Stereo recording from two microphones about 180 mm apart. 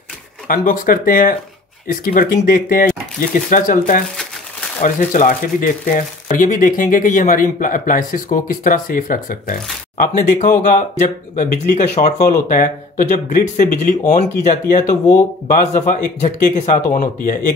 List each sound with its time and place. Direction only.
0.5 s speech: 50° left (ahead or behind)
11.7 s speech: 40° left (ahead or behind)